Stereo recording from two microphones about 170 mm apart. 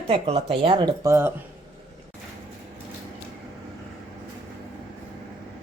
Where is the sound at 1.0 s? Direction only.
15° right (ahead or behind).